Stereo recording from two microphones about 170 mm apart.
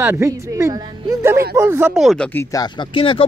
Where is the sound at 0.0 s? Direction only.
15° right (ahead or behind); by 2.4 s 5° left (ahead or behind).